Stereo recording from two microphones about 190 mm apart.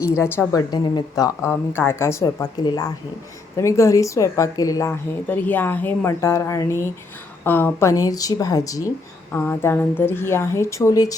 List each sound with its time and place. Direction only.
0.0 s a woman's voice: 15° left (ahead or behind)